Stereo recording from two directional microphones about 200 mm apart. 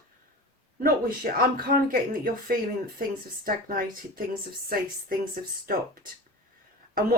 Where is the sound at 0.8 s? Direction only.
45° right (ahead or behind).